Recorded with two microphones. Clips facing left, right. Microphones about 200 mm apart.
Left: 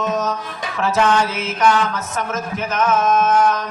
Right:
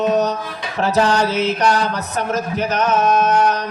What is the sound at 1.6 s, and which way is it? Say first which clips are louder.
A man's voice: even; 40° right (ahead or behind).